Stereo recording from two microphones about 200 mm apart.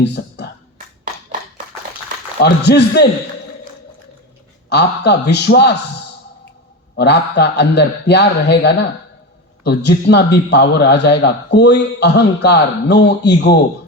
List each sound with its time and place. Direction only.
0.0 s a sound: 60° left (ahead or behind)
2.4 s a man's voice: 55° left (ahead or behind)
4.7 s a man's voice: 60° left (ahead or behind)
6.9 s a man's voice: 55° left (ahead or behind)